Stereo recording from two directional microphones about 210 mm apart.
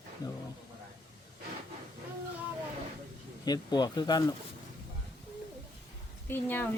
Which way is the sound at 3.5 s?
20° left (ahead or behind).